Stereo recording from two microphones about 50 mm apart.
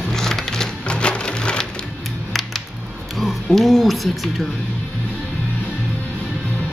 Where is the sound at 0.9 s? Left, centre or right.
Left.